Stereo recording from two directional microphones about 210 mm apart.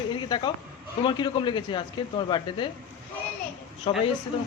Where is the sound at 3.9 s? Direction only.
25° left (ahead or behind).